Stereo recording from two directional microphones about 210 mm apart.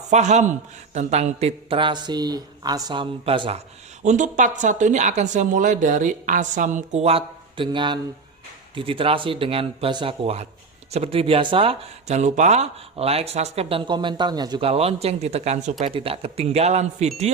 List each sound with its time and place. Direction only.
0.1 s speech: 35° right (ahead or behind)